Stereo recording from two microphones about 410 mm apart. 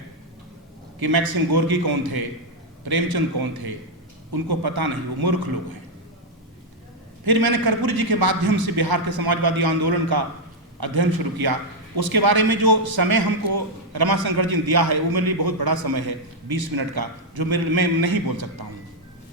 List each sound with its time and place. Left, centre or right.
0.9 s a man's voice: right
7.3 s a man's voice: right